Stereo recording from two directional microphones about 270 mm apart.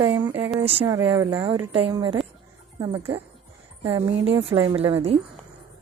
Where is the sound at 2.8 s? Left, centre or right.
Centre.